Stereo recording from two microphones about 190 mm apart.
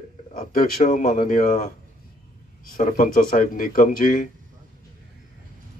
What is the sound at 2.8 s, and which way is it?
Speech, 40° left (ahead or behind).